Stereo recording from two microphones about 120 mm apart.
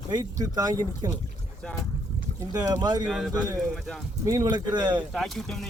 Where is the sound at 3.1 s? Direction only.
Centre (ahead or behind).